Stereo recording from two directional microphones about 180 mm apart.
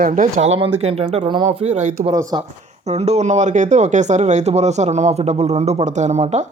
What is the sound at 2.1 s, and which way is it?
Speech, 20° right (ahead or behind).